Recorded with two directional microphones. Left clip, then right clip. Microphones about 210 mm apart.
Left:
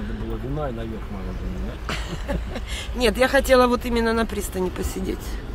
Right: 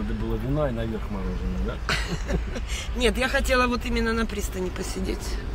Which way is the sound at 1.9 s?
15° left (ahead or behind).